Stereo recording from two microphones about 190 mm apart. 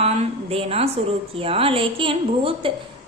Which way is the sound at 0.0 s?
30° right (ahead or behind).